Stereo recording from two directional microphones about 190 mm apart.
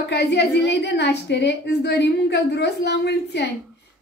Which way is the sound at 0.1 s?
60° left (ahead or behind).